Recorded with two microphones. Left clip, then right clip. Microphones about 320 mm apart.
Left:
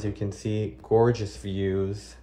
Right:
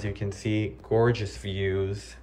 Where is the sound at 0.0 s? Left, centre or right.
Centre.